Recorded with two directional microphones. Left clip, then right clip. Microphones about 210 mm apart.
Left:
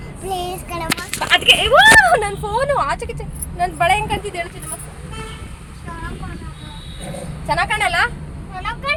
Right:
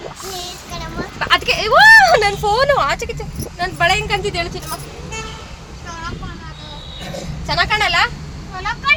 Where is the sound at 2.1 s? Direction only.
15° right (ahead or behind).